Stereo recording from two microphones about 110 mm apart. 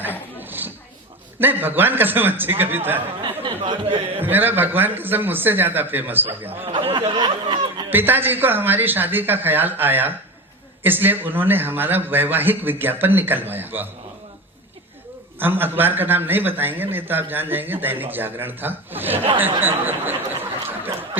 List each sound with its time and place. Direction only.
0.3 s a sound: 15° right (ahead or behind)
1.4 s a man's voice: 20° right (ahead or behind)
3.2 s speech: 45° right (ahead or behind)
4.2 s a man's voice: 15° right (ahead or behind)
6.5 s speech: 60° right (ahead or behind)
7.9 s a man's voice: 20° right (ahead or behind)
15.4 s a man's voice: 20° right (ahead or behind)